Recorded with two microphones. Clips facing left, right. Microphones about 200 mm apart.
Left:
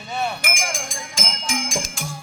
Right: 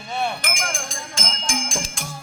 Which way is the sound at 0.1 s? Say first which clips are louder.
Even; centre (ahead or behind).